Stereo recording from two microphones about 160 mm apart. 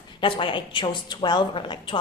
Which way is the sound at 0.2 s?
35° left (ahead or behind).